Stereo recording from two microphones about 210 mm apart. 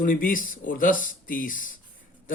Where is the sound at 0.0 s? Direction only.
40° left (ahead or behind).